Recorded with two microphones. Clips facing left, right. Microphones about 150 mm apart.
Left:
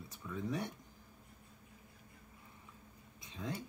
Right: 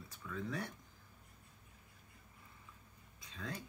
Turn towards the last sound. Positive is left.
turn(degrees=20)  # may be behind; listen again after turning